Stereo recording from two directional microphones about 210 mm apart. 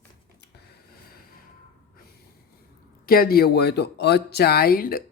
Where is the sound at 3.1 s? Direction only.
45° left (ahead or behind).